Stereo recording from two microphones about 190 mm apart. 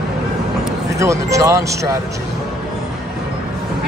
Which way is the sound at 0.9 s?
15° right (ahead or behind).